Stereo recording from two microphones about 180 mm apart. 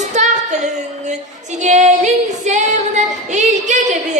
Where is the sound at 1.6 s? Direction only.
40° right (ahead or behind).